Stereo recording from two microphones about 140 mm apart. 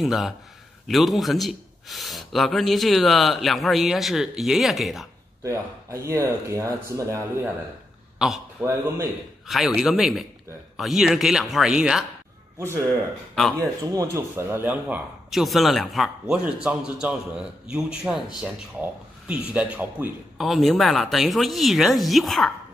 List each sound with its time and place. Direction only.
0.0 s speech: centre (ahead or behind)
5.4 s speech: 20° right (ahead or behind)
8.2 s a sound: 5° right (ahead or behind)
8.6 s speech: 20° right (ahead or behind)
9.5 s speech: centre (ahead or behind)
13.3 s speech: 5° left (ahead or behind)
13.6 s speech: 20° right (ahead or behind)
15.3 s speech: centre (ahead or behind)
20.3 s speech: centre (ahead or behind)